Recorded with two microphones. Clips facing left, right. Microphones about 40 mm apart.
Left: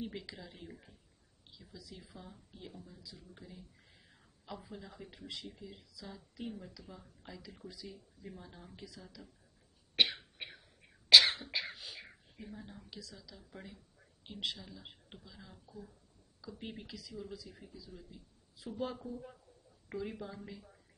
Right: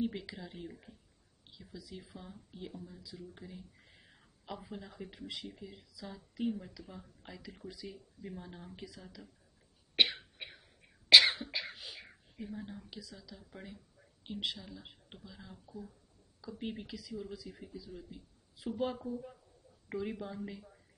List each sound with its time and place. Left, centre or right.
0.0 s speech: centre
1.5 s speech: centre
10.0 s cough: centre
10.3 s a sound: centre
11.1 s cough: centre
11.5 s beatboxing: centre
12.4 s speech: centre
18.6 s speech: right
19.0 s speech: centre
19.9 s speech: centre